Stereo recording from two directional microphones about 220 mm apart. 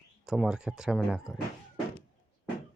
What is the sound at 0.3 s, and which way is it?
Speech, 5° right (ahead or behind).